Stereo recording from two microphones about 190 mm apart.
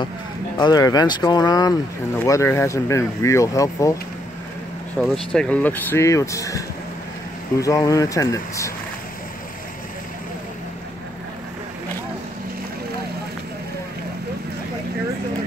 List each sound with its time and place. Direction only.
0.6 s speech: 20° left (ahead or behind)
5.0 s speech: 5° left (ahead or behind)
7.6 s speech: 15° left (ahead or behind)